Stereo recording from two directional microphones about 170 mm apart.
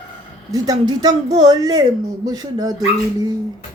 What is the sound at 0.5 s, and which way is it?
A woman's voice, 20° right (ahead or behind).